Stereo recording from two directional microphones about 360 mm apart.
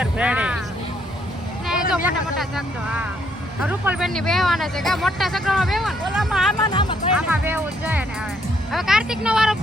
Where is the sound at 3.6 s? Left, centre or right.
Centre.